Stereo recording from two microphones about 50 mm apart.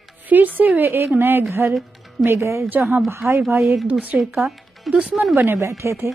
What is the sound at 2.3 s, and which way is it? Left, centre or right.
Speech, right.